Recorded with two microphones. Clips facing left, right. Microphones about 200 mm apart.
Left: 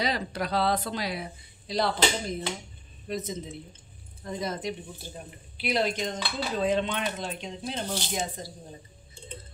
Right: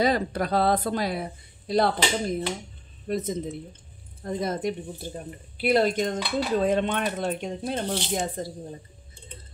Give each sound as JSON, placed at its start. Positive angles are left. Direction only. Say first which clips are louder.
{"t": 0.0, "sound": "a woman's voice", "louder": "right 6 dB", "side_deg": -50}